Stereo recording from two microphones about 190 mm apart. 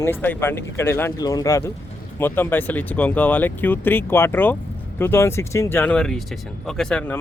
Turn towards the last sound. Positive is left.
turn(degrees=5)  # may be behind; listen again after turning